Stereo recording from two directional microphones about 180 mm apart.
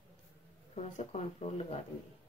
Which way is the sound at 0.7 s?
40° left (ahead or behind).